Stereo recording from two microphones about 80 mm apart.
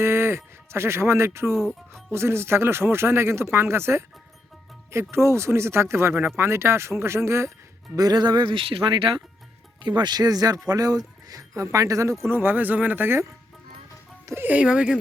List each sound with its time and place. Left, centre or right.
0.0 s speech: right
1.5 s speech: centre
2.1 s speech: right
7.9 s speech: right
9.8 s speech: right
12.2 s speech: right
14.4 s speech: centre